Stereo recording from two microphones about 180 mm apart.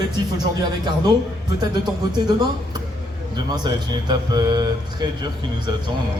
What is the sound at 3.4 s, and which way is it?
Speech, 25° right (ahead or behind).